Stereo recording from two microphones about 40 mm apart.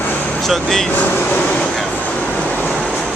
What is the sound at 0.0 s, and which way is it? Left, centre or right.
Vehicle, left.